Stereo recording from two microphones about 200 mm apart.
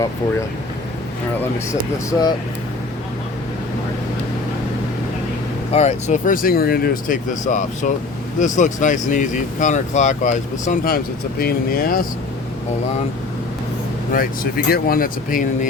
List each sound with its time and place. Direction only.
2.0 s speech: 20° left (ahead or behind)
5.7 s speech: 35° left (ahead or behind)
14.1 s speech: 45° left (ahead or behind)